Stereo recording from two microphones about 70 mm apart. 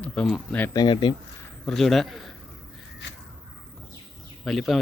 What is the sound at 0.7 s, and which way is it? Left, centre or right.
Speech, left.